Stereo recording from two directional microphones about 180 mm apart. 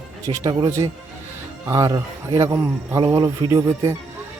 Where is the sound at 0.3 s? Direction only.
20° right (ahead or behind).